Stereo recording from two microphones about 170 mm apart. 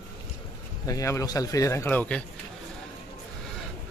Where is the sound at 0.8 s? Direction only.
20° left (ahead or behind).